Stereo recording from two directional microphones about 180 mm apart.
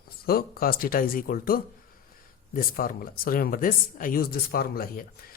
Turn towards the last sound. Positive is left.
turn(degrees=55)  # may be behind; listen again after turning